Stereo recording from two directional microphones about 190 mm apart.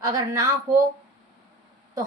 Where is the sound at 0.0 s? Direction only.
20° right (ahead or behind).